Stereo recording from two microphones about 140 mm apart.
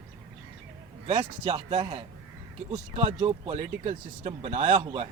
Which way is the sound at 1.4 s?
50° right (ahead or behind).